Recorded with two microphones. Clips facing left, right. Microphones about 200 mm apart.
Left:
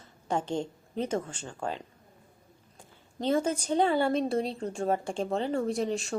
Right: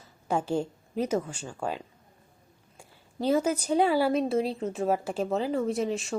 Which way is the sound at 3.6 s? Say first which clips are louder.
Right 2 dB; 10° right (ahead or behind).